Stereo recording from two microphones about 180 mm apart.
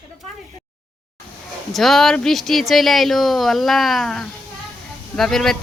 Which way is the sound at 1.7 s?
Centre (ahead or behind).